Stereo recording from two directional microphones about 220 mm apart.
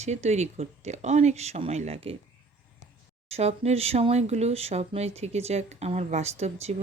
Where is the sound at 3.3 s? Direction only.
30° right (ahead or behind).